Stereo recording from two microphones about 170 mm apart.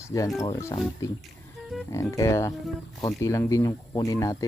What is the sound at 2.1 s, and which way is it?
Speech, 15° left (ahead or behind).